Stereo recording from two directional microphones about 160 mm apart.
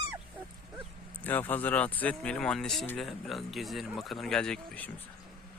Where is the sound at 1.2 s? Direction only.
10° left (ahead or behind).